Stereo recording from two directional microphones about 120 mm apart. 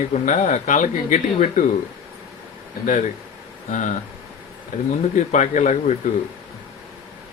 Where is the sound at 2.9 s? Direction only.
90° left.